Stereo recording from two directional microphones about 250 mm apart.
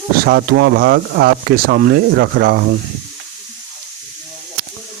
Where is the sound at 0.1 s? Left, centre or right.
Right.